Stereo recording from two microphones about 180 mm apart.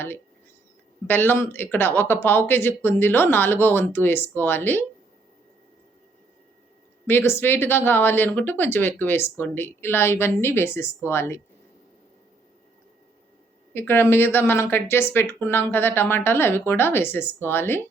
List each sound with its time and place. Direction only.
1.0 s speech: 10° left (ahead or behind)
7.1 s speech: 10° left (ahead or behind)
13.7 s speech: 15° left (ahead or behind)